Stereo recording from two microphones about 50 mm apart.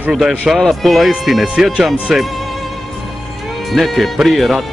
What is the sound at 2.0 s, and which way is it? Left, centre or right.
Music, centre.